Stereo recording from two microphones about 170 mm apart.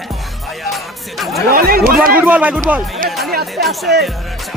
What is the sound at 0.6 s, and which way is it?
Speech, centre (ahead or behind).